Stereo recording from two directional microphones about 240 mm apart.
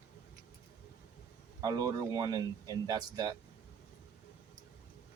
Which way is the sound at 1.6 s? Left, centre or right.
Centre.